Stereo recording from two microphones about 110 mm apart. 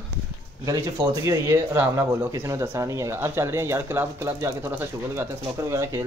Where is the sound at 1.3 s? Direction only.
25° right (ahead or behind).